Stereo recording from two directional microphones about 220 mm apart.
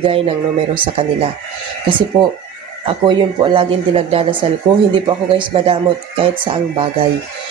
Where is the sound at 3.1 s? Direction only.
20° right (ahead or behind).